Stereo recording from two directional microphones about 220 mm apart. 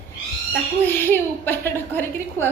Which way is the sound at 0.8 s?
10° left (ahead or behind).